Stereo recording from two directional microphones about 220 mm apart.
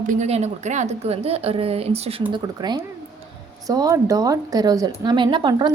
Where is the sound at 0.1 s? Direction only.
30° right (ahead or behind).